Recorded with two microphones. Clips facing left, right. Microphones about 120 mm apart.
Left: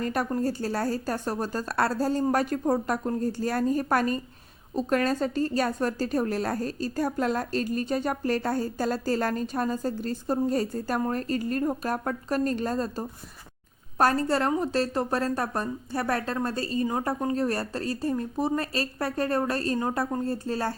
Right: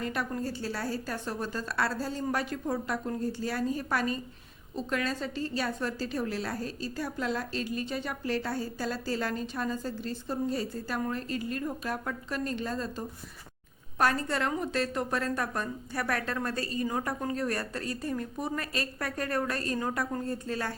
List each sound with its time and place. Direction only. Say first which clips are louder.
0.0 s a woman's voice: left 6 dB; 45° left (ahead or behind)